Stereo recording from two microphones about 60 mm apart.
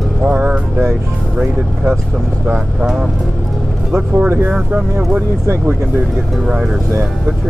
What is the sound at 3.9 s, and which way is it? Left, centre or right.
Speech, right.